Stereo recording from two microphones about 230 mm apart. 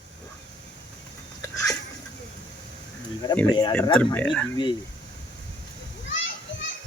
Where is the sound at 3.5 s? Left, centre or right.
Centre.